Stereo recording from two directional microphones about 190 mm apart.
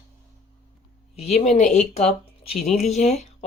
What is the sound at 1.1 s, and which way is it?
Speech, 35° left (ahead or behind).